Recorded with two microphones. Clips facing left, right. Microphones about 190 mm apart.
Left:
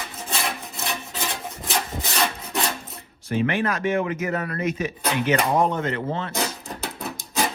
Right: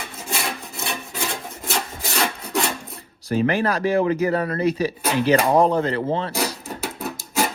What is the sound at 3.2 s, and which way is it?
Speech, 35° right (ahead or behind).